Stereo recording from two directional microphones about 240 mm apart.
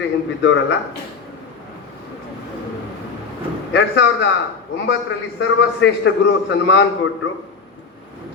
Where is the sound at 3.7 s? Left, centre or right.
Left.